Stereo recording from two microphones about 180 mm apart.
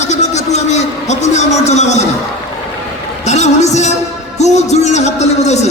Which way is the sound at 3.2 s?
40° left (ahead or behind).